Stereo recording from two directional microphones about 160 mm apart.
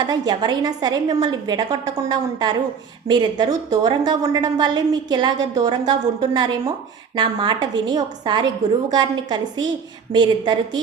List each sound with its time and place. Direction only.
0.0 s a woman's voice: 25° right (ahead or behind)